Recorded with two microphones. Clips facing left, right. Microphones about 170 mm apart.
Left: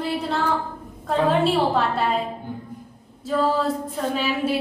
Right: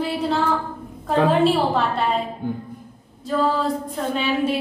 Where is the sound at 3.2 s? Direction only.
5° left (ahead or behind).